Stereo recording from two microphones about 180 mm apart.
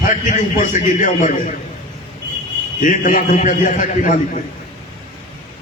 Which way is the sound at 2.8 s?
45° left (ahead or behind).